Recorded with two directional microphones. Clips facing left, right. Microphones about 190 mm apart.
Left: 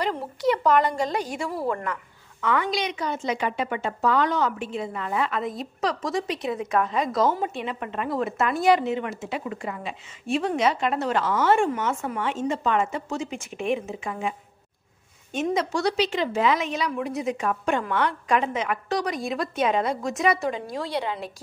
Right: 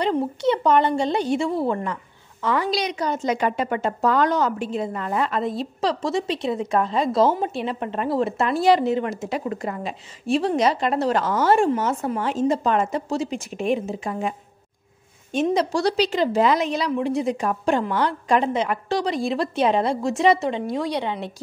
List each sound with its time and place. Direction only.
0.0 s a woman's voice: 25° right (ahead or behind)
15.3 s a woman's voice: 35° right (ahead or behind)